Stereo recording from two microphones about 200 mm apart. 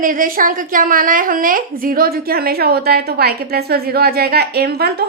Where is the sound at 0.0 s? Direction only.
45° right (ahead or behind).